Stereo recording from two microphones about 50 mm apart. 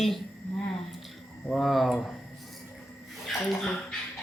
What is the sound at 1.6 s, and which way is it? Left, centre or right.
Speech, centre.